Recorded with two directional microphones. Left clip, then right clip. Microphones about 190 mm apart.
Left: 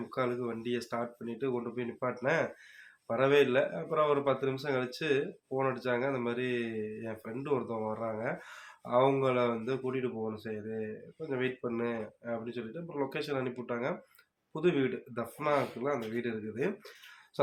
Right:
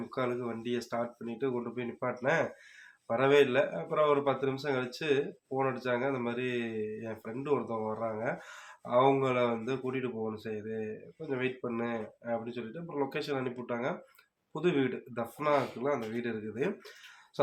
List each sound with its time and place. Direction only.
0.1 s a man's voice: centre (ahead or behind)